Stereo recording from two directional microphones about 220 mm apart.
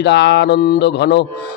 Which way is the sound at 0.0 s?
50° left (ahead or behind).